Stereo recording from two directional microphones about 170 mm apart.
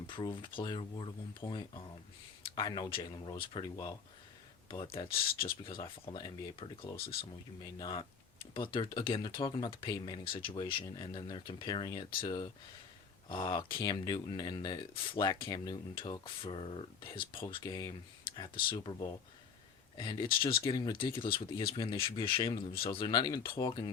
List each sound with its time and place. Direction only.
0.1 s speech: 25° left (ahead or behind)
6.9 s speech: 65° left (ahead or behind)
7.6 s speech: 25° left (ahead or behind)